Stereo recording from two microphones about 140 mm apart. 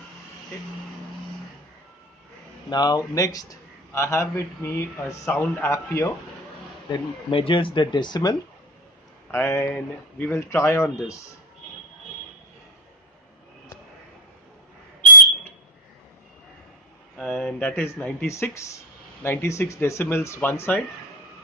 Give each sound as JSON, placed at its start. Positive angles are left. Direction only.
{"t": 2.7, "sound": "speech", "side_deg": 30}
{"t": 6.9, "sound": "speech", "side_deg": 35}
{"t": 9.3, "sound": "speech", "side_deg": 15}
{"t": 17.2, "sound": "speech", "side_deg": 5}